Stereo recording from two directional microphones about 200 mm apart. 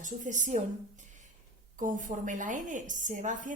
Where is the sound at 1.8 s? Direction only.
40° right (ahead or behind).